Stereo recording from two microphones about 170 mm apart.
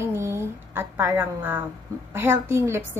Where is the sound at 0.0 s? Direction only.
15° right (ahead or behind).